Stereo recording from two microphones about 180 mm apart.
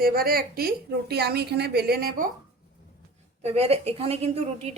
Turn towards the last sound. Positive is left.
turn(degrees=-35)  # may be behind; listen again after turning